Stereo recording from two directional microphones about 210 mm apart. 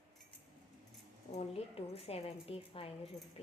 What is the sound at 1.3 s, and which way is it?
A woman's voice, 30° left (ahead or behind).